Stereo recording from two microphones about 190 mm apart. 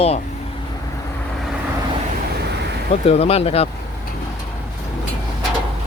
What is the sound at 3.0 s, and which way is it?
Speech, 30° left (ahead or behind).